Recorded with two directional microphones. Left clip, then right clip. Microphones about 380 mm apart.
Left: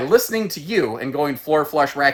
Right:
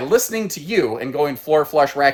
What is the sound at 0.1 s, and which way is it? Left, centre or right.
Speech, centre.